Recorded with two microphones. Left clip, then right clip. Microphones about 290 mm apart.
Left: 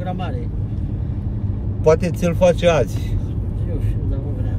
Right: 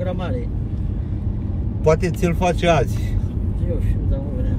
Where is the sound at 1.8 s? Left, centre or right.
Centre.